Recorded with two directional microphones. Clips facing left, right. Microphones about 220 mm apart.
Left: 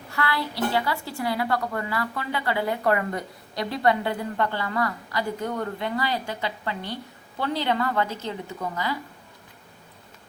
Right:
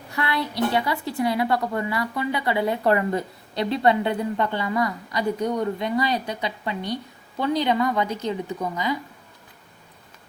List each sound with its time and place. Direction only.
0.1 s a woman's voice: 20° right (ahead or behind)